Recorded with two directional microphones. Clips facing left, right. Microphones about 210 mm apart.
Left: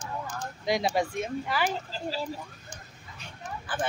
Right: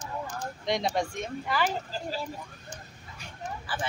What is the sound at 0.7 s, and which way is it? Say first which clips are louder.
Speech: left 2 dB; 5° left (ahead or behind).